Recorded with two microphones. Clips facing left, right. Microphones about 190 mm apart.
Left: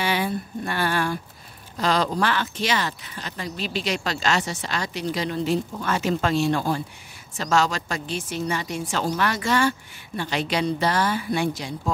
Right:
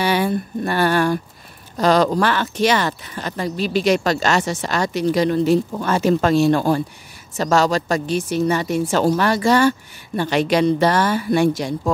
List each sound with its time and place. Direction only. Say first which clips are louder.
0.0 s a sound: right 6 dB; 40° right (ahead or behind)
1.8 s speech: right 7 dB; 45° right (ahead or behind)
5.9 s speech: right 6 dB; 35° right (ahead or behind)
9.2 s speech: right 4 dB; 35° right (ahead or behind)
10.3 s a woman's voice: right 8 dB; 55° right (ahead or behind)